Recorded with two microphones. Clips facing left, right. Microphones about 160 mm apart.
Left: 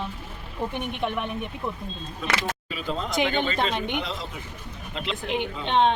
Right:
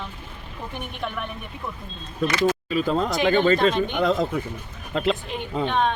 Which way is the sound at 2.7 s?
45° right (ahead or behind).